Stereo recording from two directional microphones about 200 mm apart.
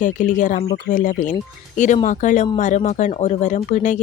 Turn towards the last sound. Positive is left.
turn(degrees=40)  # may be behind; listen again after turning